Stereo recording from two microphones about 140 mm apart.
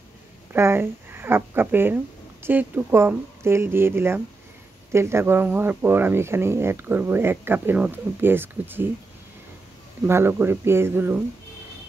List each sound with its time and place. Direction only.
0.5 s speech: 15° right (ahead or behind)
10.0 s speech: 15° right (ahead or behind)